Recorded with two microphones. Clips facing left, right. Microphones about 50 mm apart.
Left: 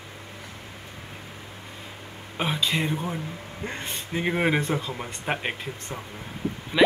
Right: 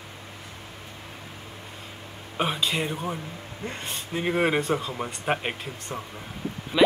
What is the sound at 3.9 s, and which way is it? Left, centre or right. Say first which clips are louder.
Speech: right 1 dB; centre.